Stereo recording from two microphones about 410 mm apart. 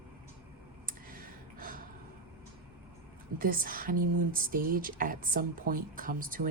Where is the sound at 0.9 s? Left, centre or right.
Right.